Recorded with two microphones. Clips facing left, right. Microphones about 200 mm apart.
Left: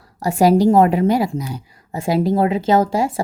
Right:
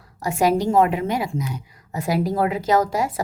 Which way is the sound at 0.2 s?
35° left (ahead or behind).